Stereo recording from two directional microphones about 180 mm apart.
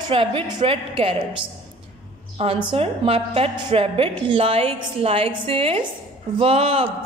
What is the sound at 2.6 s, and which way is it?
A woman's voice, 30° right (ahead or behind).